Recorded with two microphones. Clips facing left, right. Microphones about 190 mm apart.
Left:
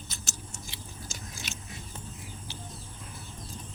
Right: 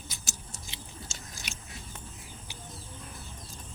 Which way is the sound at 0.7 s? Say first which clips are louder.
Left 1 dB; 25° right (ahead or behind).